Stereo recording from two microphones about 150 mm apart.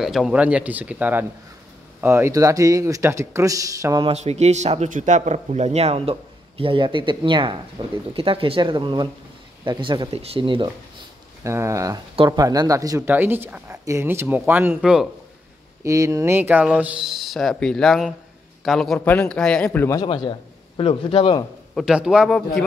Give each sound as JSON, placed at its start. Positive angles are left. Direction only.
{"t": 0.0, "sound": "speech", "side_deg": 0}
{"t": 4.0, "sound": "speech", "side_deg": -45}
{"t": 11.4, "sound": "speech", "side_deg": -20}
{"t": 15.8, "sound": "a man's voice", "side_deg": -20}
{"t": 20.0, "sound": "a man's voice", "side_deg": 30}
{"t": 21.7, "sound": "a man's voice", "side_deg": -5}